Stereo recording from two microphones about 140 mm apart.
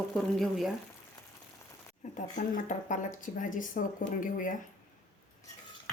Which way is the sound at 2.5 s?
65° left (ahead or behind).